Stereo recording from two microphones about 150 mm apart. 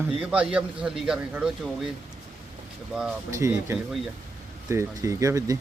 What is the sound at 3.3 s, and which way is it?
Speech, 20° right (ahead or behind).